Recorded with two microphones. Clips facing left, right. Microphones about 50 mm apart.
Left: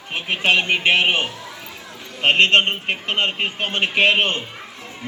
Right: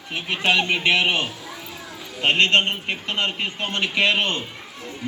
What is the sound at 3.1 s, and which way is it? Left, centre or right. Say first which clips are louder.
A man's voice: left 3 dB; left.